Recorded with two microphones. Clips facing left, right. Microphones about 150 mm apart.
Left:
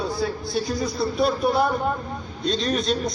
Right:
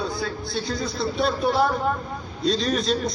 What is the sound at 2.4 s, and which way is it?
Speech, centre (ahead or behind).